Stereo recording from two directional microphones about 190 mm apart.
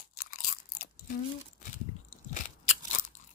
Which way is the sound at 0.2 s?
50° left (ahead or behind).